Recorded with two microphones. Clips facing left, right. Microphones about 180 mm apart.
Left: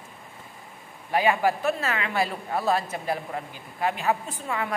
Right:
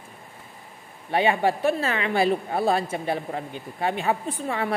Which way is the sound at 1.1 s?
30° right (ahead or behind).